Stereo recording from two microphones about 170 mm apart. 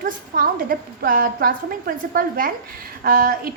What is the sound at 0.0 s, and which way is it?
A woman's voice, 55° right (ahead or behind).